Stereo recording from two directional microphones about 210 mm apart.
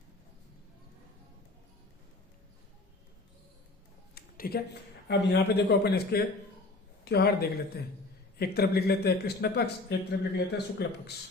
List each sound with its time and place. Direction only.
4.1 s speech: 50° left (ahead or behind)
8.4 s speech: 50° left (ahead or behind)